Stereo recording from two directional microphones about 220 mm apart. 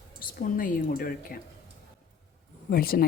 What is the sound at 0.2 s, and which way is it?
Speech, 40° left (ahead or behind).